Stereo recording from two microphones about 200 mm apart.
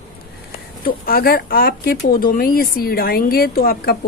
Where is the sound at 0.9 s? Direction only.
50° left (ahead or behind).